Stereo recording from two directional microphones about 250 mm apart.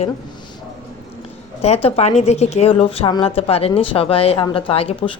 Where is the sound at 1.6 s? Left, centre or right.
Left.